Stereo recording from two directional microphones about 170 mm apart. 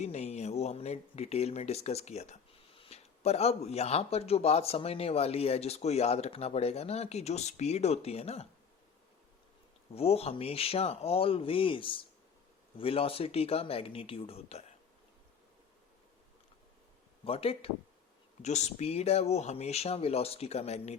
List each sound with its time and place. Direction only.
0.0 s speech: 40° left (ahead or behind)
9.9 s speech: 35° left (ahead or behind)
17.2 s speech: 35° left (ahead or behind)